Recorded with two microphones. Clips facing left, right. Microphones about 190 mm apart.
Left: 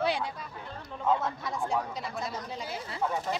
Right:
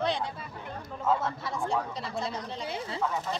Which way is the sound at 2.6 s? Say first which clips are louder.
Right 3 dB; 25° right (ahead or behind).